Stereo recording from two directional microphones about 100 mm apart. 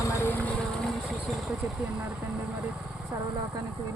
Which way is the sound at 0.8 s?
Centre (ahead or behind).